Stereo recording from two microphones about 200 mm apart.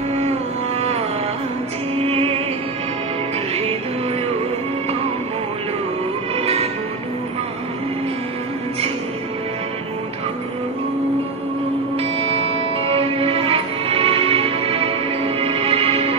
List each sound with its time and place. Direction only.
0.7 s music: 30° right (ahead or behind)
6.3 s music: 30° right (ahead or behind)
12.8 s music: 30° right (ahead or behind)